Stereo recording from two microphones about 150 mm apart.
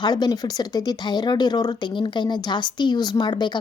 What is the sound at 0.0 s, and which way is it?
Speech, 30° left (ahead or behind).